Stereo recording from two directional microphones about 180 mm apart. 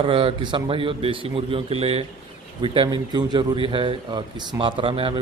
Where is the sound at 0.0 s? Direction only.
30° right (ahead or behind).